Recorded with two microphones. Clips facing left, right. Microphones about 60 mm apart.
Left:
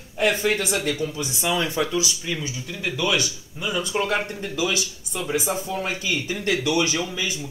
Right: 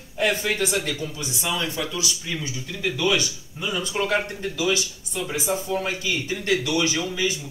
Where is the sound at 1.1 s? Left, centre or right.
Left.